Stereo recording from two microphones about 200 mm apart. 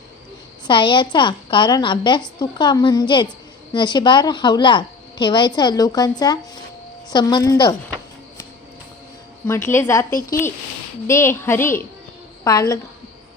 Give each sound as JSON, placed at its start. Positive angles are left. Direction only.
{"t": 0.7, "sound": "a woman's voice", "side_deg": 25}
{"t": 9.5, "sound": "a woman's voice", "side_deg": 10}
{"t": 10.1, "sound": "speech", "side_deg": 45}
{"t": 11.0, "sound": "a woman's voice", "side_deg": 15}